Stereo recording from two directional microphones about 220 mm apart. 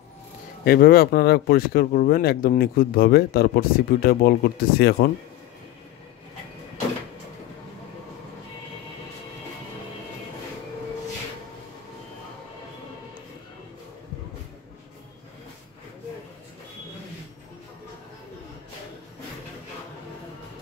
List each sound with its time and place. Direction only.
0.7 s speech: 40° left (ahead or behind)